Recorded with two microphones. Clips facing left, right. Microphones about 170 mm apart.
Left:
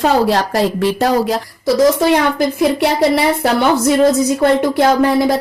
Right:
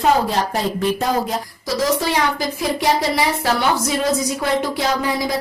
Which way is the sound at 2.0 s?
60° left (ahead or behind).